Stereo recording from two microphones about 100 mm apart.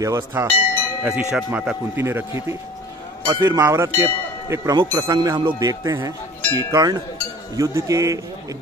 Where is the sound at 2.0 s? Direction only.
25° right (ahead or behind).